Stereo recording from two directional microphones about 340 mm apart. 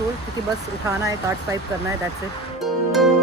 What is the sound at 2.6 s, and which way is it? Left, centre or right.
Music, centre.